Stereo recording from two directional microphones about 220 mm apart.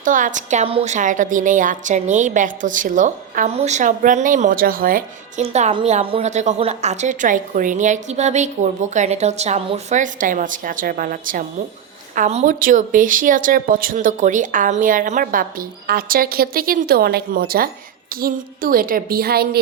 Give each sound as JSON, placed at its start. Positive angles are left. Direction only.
{"t": 0.0, "sound": "a woman's voice", "side_deg": -35}